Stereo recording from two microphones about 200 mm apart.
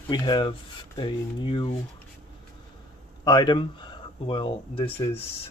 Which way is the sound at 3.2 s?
20° left (ahead or behind).